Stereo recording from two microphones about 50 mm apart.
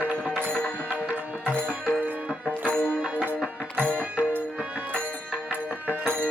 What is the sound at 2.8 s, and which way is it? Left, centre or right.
Music, right.